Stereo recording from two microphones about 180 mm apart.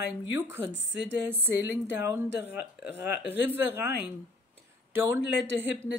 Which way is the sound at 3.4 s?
10° right (ahead or behind).